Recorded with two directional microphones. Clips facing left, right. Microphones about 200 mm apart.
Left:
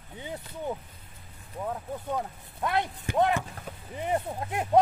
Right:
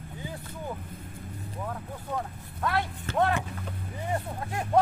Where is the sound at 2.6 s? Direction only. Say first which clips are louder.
Left 1 dB; 20° left (ahead or behind).